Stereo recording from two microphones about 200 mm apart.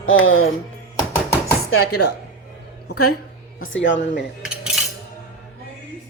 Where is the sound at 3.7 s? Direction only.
65° left (ahead or behind).